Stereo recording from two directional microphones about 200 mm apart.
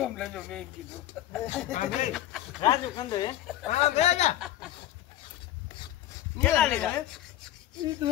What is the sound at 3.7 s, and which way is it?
Speech, 35° left (ahead or behind).